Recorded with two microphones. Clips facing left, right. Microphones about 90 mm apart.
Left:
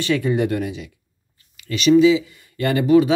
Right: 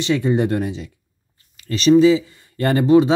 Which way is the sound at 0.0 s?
25° right (ahead or behind).